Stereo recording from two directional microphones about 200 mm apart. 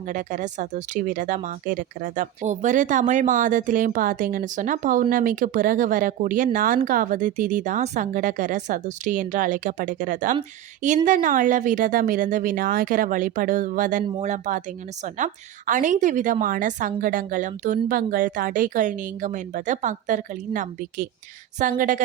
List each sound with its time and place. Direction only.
0.1 s speech: 40° right (ahead or behind)